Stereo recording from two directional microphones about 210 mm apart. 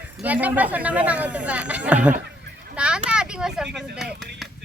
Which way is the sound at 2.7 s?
5° right (ahead or behind).